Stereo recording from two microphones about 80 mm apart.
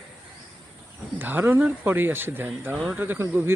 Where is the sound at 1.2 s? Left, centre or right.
Right.